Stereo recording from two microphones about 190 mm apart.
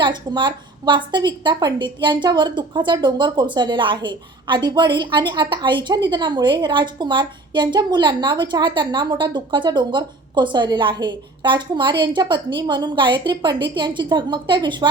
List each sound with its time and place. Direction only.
0.0 s a woman's voice: 25° right (ahead or behind)